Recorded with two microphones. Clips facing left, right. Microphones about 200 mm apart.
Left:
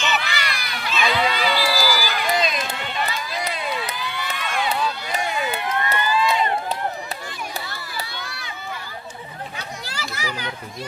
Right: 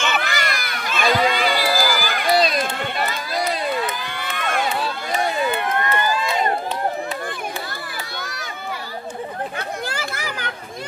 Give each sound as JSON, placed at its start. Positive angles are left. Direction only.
{"t": 0.0, "sound": "run", "side_deg": -50}
{"t": 2.3, "sound": "run", "side_deg": -40}
{"t": 2.6, "sound": "run", "side_deg": -50}
{"t": 3.9, "sound": "crowd", "side_deg": -50}
{"t": 5.5, "sound": "run", "side_deg": -55}
{"t": 9.8, "sound": "children playing", "side_deg": -55}